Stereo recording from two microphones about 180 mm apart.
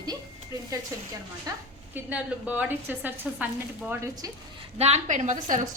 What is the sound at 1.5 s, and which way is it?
Speech, 20° right (ahead or behind).